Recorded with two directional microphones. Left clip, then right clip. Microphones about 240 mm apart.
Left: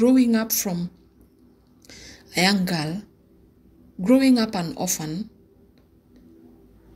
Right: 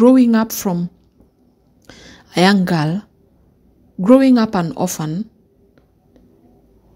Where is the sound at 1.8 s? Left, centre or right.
Right.